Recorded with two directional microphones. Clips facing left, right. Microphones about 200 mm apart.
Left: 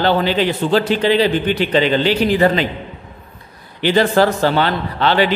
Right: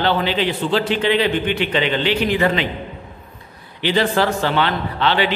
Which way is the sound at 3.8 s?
45° left (ahead or behind).